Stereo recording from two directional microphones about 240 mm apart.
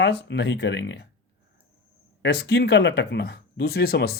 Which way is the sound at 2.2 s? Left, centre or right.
Left.